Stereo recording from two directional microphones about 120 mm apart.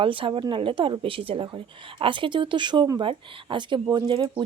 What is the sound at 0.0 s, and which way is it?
A woman's voice, 45° right (ahead or behind).